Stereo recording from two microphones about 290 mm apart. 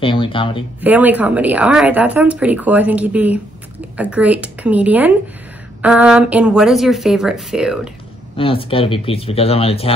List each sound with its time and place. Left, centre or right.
0.0 s speech: centre
0.7 s a woman's voice: centre
8.4 s speech: centre